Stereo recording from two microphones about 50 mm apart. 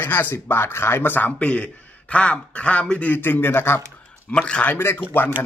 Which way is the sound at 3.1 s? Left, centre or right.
Left.